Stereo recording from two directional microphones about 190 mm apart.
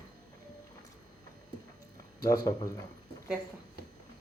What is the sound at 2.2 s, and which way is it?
Speech, 15° left (ahead or behind).